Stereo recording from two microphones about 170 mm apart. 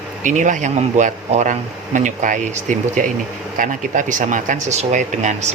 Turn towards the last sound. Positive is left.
turn(degrees=-45)  # may be behind; listen again after turning